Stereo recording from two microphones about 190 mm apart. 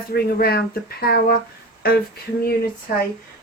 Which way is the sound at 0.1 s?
55° left (ahead or behind).